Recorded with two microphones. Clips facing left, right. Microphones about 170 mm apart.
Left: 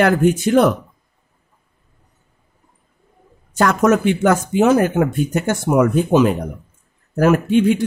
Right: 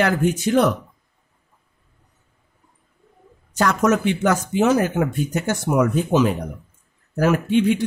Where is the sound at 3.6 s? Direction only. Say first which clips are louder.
Left 4 dB; 55° left (ahead or behind).